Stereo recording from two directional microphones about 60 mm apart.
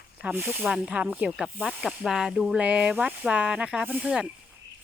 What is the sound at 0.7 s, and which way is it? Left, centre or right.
Speech, centre.